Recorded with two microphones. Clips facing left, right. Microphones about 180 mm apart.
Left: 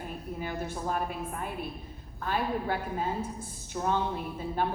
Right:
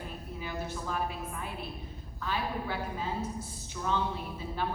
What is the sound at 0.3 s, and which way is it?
A woman's voice, 50° left (ahead or behind).